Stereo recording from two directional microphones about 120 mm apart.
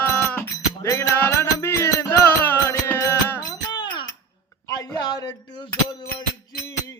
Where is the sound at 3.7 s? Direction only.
35° left (ahead or behind).